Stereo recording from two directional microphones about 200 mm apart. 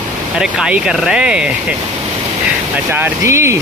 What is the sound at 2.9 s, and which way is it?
Speech, 10° right (ahead or behind).